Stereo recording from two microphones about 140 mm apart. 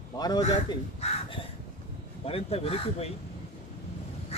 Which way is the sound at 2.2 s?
45° left (ahead or behind).